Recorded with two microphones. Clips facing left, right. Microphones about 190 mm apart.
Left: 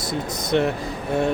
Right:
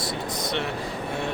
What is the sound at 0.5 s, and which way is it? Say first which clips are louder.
Speech: left 11 dB; 45° left (ahead or behind).